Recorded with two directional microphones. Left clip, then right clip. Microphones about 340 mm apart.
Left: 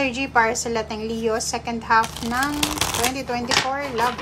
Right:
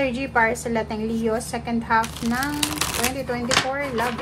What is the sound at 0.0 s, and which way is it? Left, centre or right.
A woman's voice, centre.